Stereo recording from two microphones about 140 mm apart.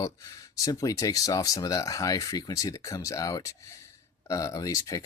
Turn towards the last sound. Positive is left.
turn(degrees=25)  # may be behind; listen again after turning